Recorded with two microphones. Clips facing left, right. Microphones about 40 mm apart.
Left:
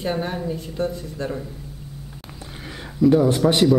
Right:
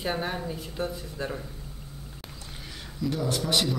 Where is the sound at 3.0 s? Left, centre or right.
Left.